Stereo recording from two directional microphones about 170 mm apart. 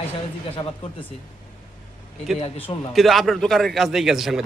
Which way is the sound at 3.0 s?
Centre (ahead or behind).